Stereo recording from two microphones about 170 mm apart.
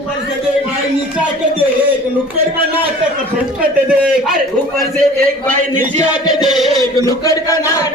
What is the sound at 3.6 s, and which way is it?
Speech, 5° right (ahead or behind).